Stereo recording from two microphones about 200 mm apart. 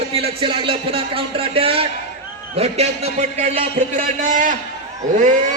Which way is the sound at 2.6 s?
30° right (ahead or behind).